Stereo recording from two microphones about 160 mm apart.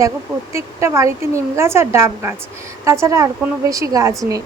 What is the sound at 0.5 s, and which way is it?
A woman's voice, 15° right (ahead or behind).